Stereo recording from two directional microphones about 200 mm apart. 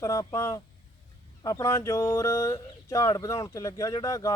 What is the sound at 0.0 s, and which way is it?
Speech, 15° left (ahead or behind).